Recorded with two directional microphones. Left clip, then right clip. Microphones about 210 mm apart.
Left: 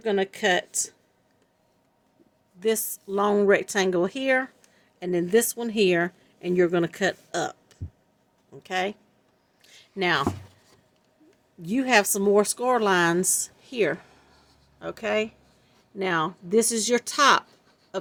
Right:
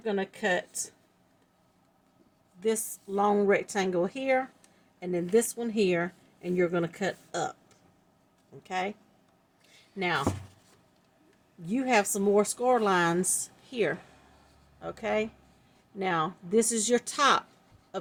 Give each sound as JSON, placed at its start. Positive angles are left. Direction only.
{"t": 0.0, "sound": "speech", "side_deg": 50}
{"t": 2.6, "sound": "speech", "side_deg": 30}
{"t": 9.6, "sound": "a sound", "side_deg": 40}
{"t": 11.6, "sound": "speech", "side_deg": 35}